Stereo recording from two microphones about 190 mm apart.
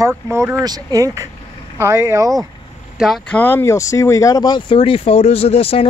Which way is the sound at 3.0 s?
5° left (ahead or behind).